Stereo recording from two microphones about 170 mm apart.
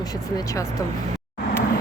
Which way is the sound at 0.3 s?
20° left (ahead or behind).